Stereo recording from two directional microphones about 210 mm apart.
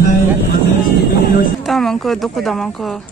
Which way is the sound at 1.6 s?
Centre (ahead or behind).